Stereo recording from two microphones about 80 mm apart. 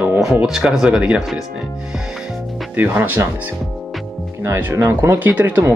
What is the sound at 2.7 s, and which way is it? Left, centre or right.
Speech, right.